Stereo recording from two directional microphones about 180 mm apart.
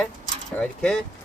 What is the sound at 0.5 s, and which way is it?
Speech, 5° left (ahead or behind).